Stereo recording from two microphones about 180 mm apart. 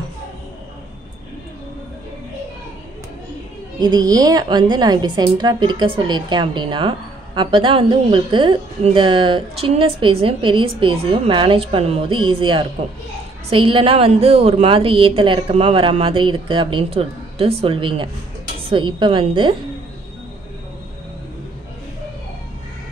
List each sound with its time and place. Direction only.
3.8 s a woman's voice: 20° right (ahead or behind)